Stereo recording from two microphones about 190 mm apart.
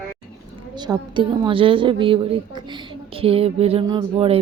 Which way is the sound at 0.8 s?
20° right (ahead or behind).